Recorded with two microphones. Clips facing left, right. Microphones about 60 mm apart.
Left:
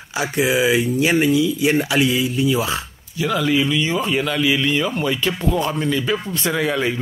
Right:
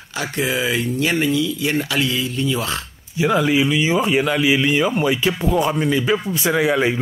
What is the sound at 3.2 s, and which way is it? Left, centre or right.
Speech, right.